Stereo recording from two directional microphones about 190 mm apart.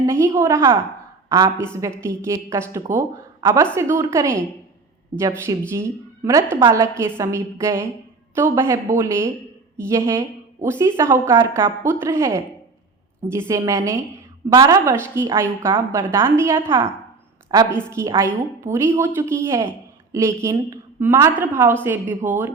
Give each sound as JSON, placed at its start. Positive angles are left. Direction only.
{"t": 0.0, "sound": "a woman's voice", "side_deg": -15}
{"t": 13.5, "sound": "a woman's voice", "side_deg": -15}